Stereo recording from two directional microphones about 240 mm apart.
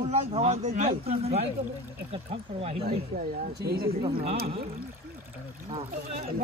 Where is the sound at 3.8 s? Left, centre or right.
Right.